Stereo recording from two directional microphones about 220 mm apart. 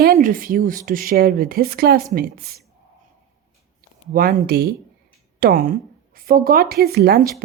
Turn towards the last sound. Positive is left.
turn(degrees=-45)  # may be behind; listen again after turning